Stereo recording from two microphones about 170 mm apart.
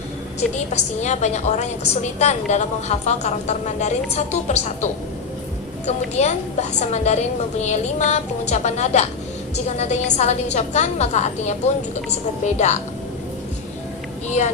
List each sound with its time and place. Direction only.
0.3 s a woman's voice: 40° left (ahead or behind)
14.3 s a woman's voice: 40° left (ahead or behind)